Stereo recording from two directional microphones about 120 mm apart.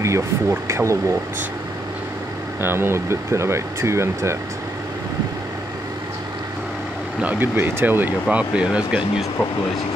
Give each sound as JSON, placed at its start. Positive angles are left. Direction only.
{"t": 0.0, "sound": "speech", "side_deg": -25}
{"t": 2.6, "sound": "speech", "side_deg": -20}
{"t": 7.2, "sound": "speech", "side_deg": -15}